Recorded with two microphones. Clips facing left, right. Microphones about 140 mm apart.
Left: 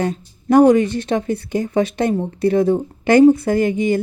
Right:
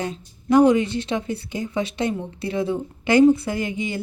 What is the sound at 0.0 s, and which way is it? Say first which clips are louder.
A woman's voice: left 7 dB; 50° left (ahead or behind).